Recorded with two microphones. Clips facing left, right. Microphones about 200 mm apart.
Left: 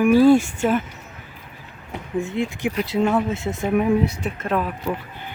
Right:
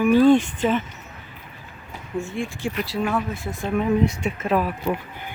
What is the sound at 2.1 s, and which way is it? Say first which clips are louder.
Speech: left 4 dB; 20° left (ahead or behind).